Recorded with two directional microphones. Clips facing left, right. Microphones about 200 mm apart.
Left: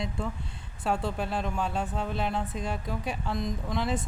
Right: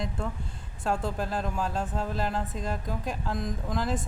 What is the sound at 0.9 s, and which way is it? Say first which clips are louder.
Speech: even; centre (ahead or behind).